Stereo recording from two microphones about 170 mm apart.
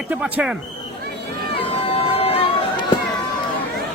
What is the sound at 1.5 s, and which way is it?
Run, 35° left (ahead or behind).